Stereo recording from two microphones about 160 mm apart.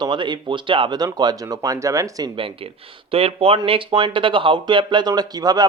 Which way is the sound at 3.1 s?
35° right (ahead or behind).